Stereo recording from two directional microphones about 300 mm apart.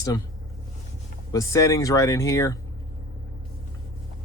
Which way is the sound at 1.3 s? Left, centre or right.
Centre.